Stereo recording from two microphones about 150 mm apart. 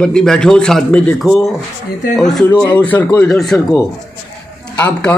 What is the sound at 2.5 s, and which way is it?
A man's voice, 10° left (ahead or behind).